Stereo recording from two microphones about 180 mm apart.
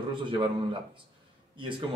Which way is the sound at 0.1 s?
30° right (ahead or behind).